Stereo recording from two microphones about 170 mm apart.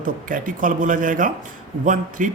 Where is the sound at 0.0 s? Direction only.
50° right (ahead or behind).